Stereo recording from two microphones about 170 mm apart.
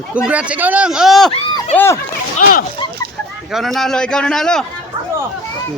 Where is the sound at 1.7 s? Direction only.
15° left (ahead or behind).